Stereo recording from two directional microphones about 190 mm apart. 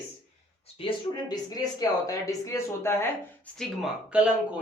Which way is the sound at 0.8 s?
25° left (ahead or behind).